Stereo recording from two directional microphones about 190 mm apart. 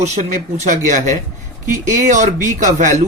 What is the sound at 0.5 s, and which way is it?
Speech, 40° right (ahead or behind).